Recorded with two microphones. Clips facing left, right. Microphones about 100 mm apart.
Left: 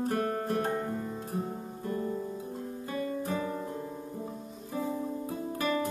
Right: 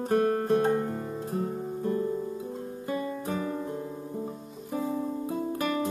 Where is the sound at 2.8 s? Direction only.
30° right (ahead or behind).